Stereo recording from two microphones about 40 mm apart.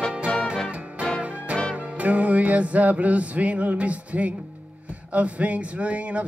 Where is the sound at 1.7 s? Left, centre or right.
Right.